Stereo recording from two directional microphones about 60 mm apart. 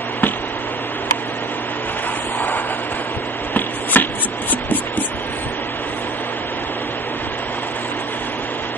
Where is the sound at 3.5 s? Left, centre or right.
Left.